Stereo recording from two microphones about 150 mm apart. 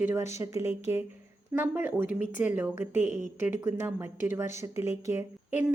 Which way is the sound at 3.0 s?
50° left (ahead or behind).